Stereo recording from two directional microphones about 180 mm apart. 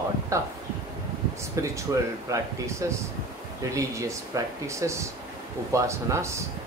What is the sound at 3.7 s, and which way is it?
Speech, 15° right (ahead or behind).